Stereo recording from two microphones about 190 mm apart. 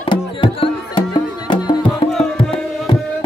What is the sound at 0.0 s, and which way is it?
Music, 25° left (ahead or behind).